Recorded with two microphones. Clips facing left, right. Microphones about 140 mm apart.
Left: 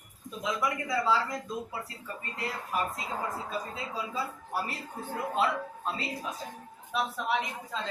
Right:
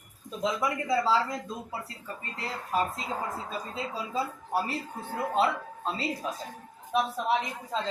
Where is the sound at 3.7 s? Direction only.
30° right (ahead or behind).